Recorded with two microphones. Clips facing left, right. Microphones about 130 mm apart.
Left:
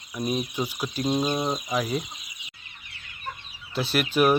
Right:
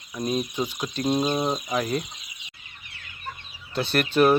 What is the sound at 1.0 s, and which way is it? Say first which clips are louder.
Speech: right 2 dB; 10° right (ahead or behind).